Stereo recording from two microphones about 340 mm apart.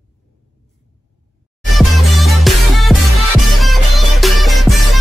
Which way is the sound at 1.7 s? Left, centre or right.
Centre.